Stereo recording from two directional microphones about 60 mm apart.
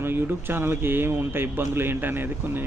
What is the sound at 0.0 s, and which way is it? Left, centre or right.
A man's voice, right.